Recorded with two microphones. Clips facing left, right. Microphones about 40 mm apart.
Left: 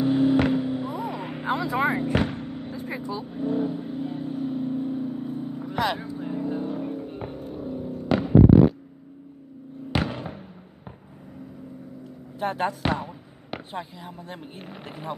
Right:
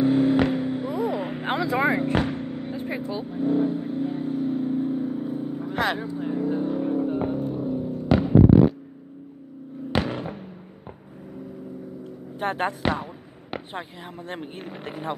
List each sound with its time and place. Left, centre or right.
0.0 s vehicle: centre
1.4 s vehicle: right
2.1 s vehicle: centre
2.7 s vehicle: right
3.3 s vehicle: centre
6.9 s music: centre
9.9 s fireworks: centre
12.4 s speech: right
12.8 s a sound: centre
14.6 s speech: centre